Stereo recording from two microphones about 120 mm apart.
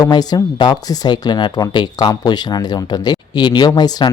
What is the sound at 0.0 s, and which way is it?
Speech, 35° left (ahead or behind).